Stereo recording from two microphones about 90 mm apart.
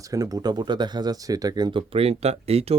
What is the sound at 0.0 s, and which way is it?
Speech, 40° right (ahead or behind).